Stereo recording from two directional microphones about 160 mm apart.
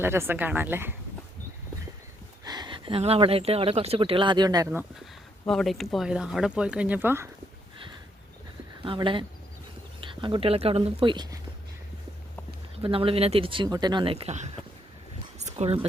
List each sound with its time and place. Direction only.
0.0 s speech: 15° right (ahead or behind)
2.4 s speech: 25° right (ahead or behind)
5.5 s speech: centre (ahead or behind)
8.8 s speech: 30° right (ahead or behind)
12.8 s speech: 35° right (ahead or behind)
15.4 s a sound: 45° right (ahead or behind)